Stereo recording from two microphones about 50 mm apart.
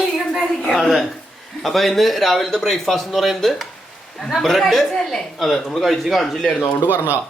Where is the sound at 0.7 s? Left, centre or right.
Centre.